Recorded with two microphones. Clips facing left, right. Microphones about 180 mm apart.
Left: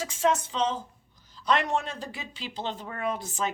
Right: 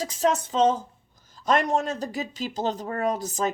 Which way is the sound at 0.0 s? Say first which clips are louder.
Right 2 dB; 40° right (ahead or behind).